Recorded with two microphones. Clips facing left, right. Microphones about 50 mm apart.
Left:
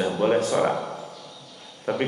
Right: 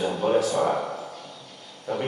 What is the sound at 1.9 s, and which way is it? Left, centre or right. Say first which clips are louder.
Speech: left 3 dB; left.